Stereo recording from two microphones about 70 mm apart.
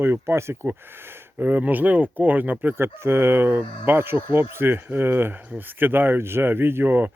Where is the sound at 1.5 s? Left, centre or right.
Right.